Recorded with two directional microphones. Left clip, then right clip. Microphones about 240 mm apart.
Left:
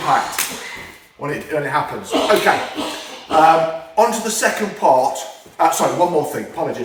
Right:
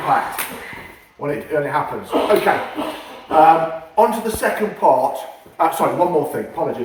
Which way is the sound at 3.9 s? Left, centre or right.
Left.